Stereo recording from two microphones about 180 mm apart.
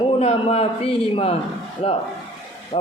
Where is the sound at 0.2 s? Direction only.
35° left (ahead or behind).